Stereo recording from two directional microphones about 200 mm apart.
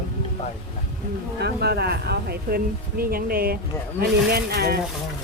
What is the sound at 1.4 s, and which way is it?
Speech, 55° right (ahead or behind).